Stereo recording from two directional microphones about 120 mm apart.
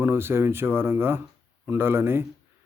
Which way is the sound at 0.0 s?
20° right (ahead or behind).